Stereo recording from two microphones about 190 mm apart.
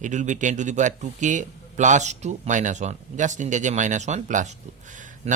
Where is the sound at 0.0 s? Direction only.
40° right (ahead or behind).